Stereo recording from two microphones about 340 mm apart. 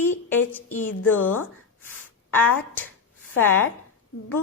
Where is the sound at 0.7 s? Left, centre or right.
Left.